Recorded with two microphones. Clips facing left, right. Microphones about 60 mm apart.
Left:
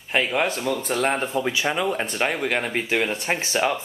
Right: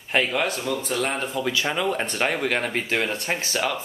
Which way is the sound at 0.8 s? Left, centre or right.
Left.